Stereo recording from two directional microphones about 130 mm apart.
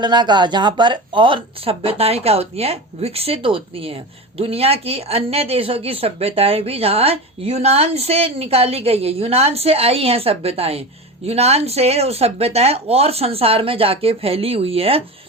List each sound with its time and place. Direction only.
0.0 s speech: 35° right (ahead or behind)